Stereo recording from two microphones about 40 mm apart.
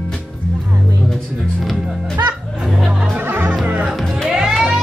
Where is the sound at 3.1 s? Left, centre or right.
Right.